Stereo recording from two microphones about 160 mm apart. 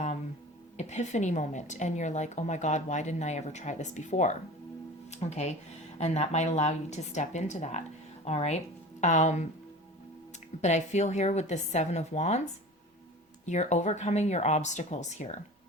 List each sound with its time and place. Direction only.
0.8 s a woman's voice: 45° left (ahead or behind)
10.6 s a woman's voice: 45° left (ahead or behind)
13.4 s a woman's voice: 45° left (ahead or behind)